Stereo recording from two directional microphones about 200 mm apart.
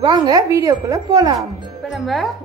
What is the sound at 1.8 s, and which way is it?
Speech, centre (ahead or behind).